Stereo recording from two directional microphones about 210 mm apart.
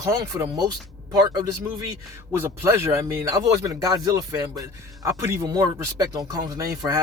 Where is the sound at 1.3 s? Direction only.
15° right (ahead or behind).